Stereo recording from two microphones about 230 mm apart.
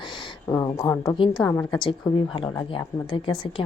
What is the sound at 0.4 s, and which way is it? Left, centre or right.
A woman's voice, centre.